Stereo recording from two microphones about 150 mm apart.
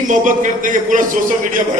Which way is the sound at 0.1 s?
60° right (ahead or behind).